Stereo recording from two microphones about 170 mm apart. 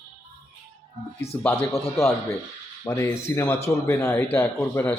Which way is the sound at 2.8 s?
15° left (ahead or behind).